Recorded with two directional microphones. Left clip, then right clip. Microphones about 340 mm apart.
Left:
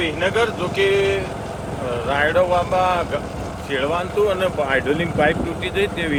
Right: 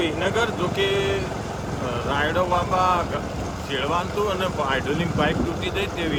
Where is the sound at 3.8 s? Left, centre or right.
Left.